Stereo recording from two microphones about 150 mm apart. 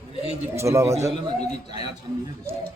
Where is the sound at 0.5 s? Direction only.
20° right (ahead or behind).